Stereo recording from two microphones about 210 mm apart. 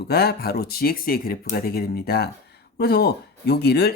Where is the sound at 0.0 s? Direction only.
50° left (ahead or behind).